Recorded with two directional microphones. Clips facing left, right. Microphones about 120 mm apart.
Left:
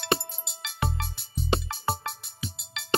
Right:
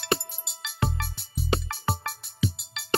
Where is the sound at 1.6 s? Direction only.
15° left (ahead or behind).